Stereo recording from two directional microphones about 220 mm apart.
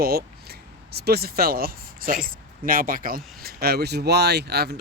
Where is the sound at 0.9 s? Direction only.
45° right (ahead or behind).